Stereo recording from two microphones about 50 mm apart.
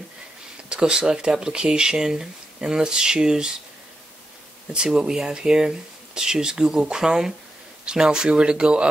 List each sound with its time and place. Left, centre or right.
0.7 s speech: centre
4.7 s speech: centre